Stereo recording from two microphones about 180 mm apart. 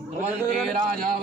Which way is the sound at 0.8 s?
55° right (ahead or behind).